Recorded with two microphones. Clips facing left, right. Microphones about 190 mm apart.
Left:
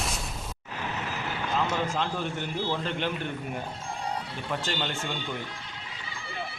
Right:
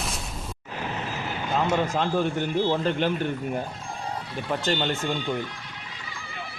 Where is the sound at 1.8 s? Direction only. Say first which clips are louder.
Right 6 dB; 45° right (ahead or behind).